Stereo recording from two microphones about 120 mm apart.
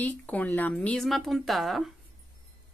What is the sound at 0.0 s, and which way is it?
Speech, 15° left (ahead or behind).